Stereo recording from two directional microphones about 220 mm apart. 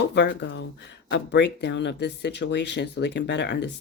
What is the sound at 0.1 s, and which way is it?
Speech, 50° left (ahead or behind).